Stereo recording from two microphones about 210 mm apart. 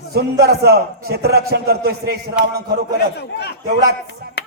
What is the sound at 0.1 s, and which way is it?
Speech, 50° right (ahead or behind).